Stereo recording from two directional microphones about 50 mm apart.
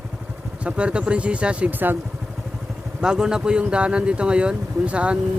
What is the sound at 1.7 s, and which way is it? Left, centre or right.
Speech, right.